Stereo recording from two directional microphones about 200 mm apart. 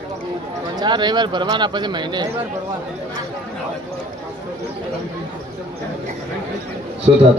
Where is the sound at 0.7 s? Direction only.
20° right (ahead or behind).